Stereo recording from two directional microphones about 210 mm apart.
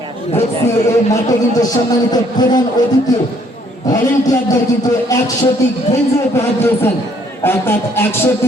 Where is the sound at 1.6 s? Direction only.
20° left (ahead or behind).